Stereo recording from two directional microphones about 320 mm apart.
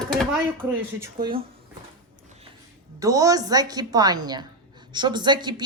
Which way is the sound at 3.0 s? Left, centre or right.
Centre.